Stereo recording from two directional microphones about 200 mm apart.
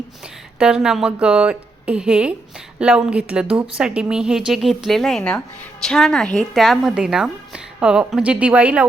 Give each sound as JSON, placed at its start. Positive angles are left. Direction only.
{"t": 0.6, "sound": "a woman's voice", "side_deg": -5}